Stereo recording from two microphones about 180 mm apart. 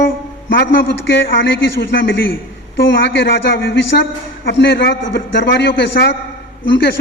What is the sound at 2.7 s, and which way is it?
A man's voice, 60° left (ahead or behind).